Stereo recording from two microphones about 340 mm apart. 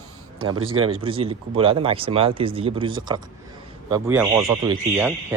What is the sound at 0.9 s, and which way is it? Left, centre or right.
A man's voice, centre.